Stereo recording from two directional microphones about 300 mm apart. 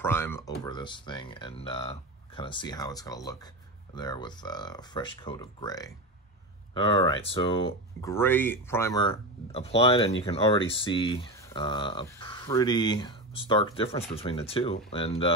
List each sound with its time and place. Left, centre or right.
0.0 s speech: centre